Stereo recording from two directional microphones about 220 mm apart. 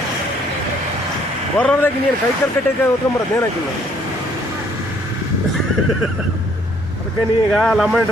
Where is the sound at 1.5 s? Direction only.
5° left (ahead or behind).